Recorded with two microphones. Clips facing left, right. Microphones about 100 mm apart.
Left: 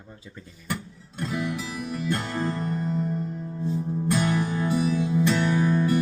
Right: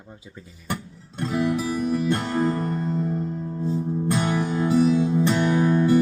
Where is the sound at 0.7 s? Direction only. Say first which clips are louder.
Right 2 dB; 30° right (ahead or behind).